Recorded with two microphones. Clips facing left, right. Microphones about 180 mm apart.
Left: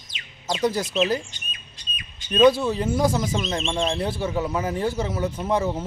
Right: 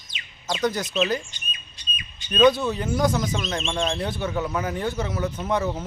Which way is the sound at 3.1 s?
5° left (ahead or behind).